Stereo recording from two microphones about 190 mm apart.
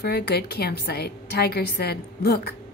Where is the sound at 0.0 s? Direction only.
55° left (ahead or behind).